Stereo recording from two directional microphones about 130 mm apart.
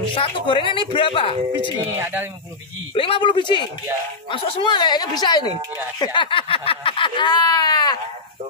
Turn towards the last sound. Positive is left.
turn(degrees=35)  # may be behind; listen again after turning